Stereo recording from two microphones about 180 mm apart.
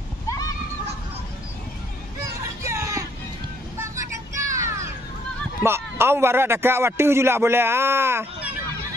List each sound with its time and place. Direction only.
2.6 s music: 15° right (ahead or behind)
3.7 s vehicle: 15° right (ahead or behind)
5.6 s a man's voice: 15° right (ahead or behind)